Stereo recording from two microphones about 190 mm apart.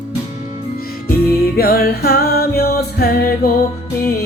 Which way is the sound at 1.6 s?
55° left (ahead or behind).